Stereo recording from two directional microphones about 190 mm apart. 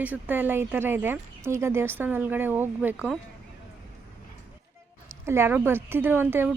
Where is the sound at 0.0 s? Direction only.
10° right (ahead or behind).